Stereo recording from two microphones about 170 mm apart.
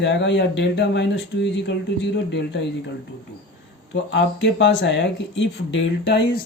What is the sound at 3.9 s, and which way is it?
Speech, 90° left.